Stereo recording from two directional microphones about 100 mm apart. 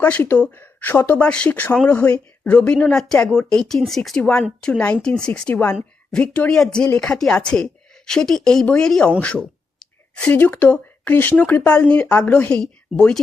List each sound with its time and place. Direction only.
0.3 s speech: 15° left (ahead or behind)